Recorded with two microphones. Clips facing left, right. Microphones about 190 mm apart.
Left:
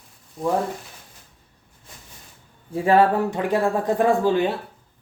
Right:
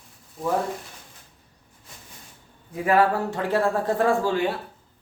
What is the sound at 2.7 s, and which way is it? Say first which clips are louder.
Speech: left 3 dB; 25° left (ahead or behind).